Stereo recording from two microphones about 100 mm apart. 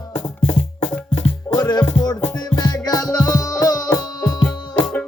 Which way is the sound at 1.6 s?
45° left (ahead or behind).